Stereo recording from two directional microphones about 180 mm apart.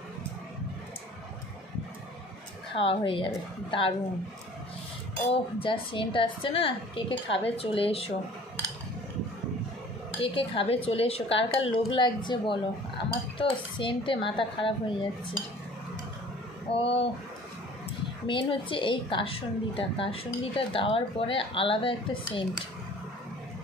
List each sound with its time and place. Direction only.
2.7 s a woman's voice: 30° left (ahead or behind)
5.3 s a woman's voice: 30° left (ahead or behind)
10.2 s a woman's voice: 30° left (ahead or behind)
16.7 s a woman's voice: 30° left (ahead or behind)
18.2 s a woman's voice: 30° left (ahead or behind)